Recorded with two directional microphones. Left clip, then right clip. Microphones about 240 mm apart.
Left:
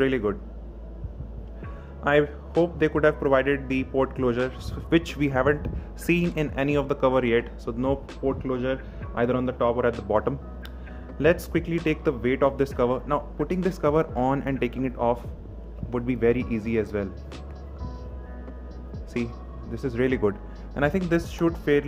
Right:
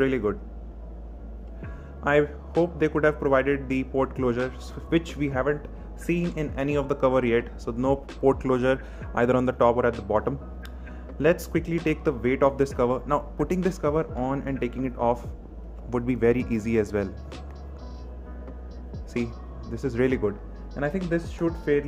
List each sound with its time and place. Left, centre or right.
0.0 s a man's voice: centre
2.0 s a man's voice: centre
8.2 s speech: centre
9.8 s a man's voice: centre
19.1 s speech: centre